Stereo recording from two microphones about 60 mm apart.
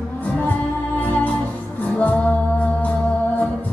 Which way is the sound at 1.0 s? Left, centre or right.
Left.